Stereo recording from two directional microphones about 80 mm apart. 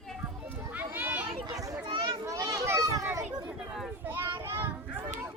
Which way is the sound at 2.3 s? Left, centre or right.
Right.